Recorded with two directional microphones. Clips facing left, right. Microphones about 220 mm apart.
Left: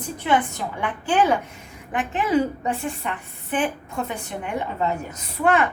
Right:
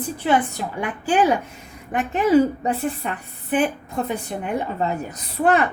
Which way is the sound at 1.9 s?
40° right (ahead or behind).